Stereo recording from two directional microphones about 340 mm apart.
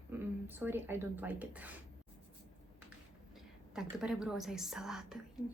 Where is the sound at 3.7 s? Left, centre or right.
Centre.